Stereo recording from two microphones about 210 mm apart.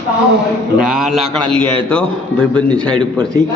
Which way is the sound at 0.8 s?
Centre (ahead or behind).